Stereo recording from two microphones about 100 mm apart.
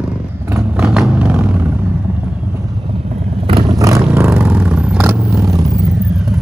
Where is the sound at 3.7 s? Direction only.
35° right (ahead or behind).